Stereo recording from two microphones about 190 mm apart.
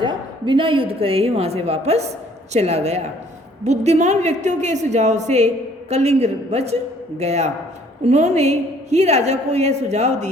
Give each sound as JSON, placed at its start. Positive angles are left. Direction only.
{"t": 0.0, "sound": "a woman's voice", "side_deg": -25}